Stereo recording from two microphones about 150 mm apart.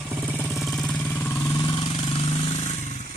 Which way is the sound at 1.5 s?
25° left (ahead or behind).